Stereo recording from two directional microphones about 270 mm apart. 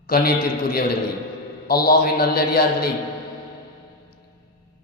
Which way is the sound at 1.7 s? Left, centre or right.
Left.